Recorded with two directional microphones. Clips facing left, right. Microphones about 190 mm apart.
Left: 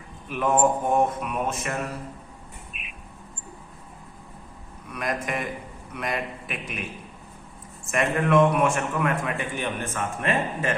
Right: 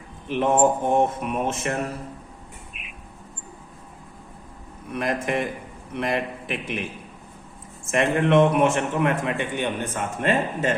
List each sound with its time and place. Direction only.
0.3 s a man's voice: 25° right (ahead or behind)
4.9 s a man's voice: 30° right (ahead or behind)
7.9 s a man's voice: 25° right (ahead or behind)